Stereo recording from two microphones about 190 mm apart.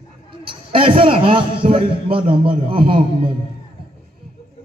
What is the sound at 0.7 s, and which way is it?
A man's voice, 30° right (ahead or behind).